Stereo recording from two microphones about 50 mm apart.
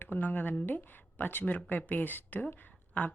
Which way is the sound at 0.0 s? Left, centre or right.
Left.